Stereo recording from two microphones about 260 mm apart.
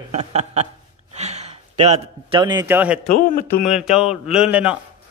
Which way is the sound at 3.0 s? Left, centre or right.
Left.